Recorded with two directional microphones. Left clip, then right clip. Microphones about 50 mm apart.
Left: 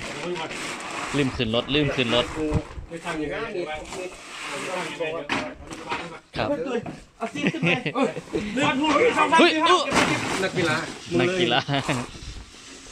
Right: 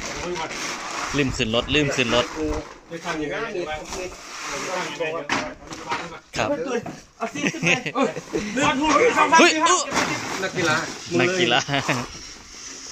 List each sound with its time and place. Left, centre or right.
0.0 s vehicle: centre
0.3 s speech: centre
7.4 s speech: centre
9.4 s speech: centre